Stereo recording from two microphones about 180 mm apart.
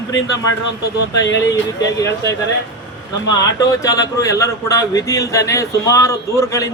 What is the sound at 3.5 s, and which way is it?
A man's voice, 20° left (ahead or behind).